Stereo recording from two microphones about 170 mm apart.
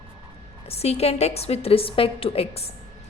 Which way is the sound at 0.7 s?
35° left (ahead or behind).